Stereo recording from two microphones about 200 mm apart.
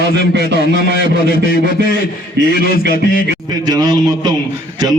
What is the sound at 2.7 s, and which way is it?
Speech, 45° left (ahead or behind).